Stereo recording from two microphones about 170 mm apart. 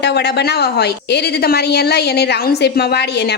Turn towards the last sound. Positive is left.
turn(degrees=75)  # may be behind; listen again after turning